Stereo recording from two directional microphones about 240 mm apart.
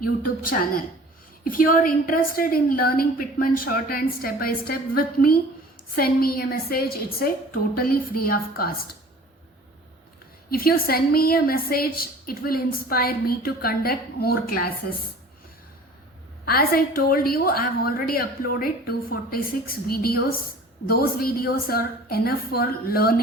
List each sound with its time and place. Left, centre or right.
1.5 s a woman's voice: left
10.5 s a woman's voice: left
16.5 s a woman's voice: left